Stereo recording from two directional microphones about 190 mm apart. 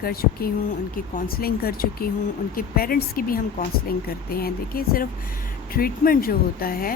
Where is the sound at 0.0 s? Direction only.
50° left (ahead or behind).